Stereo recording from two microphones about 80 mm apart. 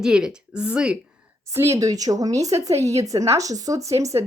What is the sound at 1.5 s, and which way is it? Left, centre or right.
A woman's voice, right.